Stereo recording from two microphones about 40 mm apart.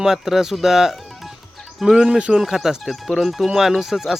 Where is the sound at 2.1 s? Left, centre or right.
Right.